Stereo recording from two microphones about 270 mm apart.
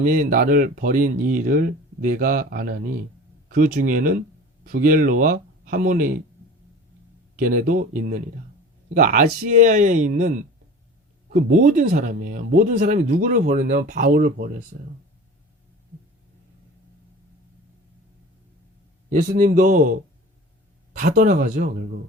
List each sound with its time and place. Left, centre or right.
0.0 s speech: right
7.3 s speech: right
19.1 s speech: right
21.0 s speech: right